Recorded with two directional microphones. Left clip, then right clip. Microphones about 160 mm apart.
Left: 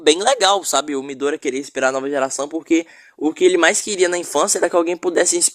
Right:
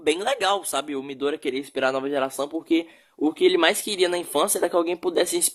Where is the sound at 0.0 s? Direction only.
50° left (ahead or behind).